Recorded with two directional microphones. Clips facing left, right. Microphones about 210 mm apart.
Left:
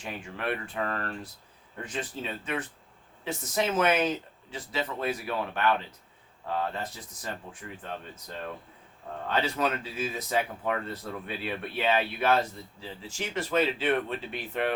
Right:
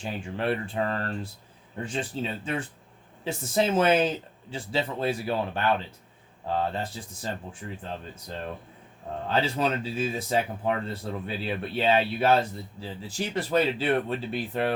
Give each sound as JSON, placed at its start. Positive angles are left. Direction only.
{"t": 0.0, "sound": "speech", "side_deg": -30}
{"t": 9.3, "sound": "speech", "side_deg": -30}